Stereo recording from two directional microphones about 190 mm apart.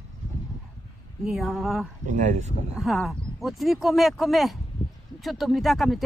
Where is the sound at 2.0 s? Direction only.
40° right (ahead or behind).